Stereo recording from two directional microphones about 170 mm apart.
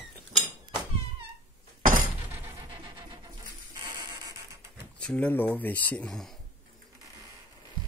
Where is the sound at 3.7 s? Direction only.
25° right (ahead or behind).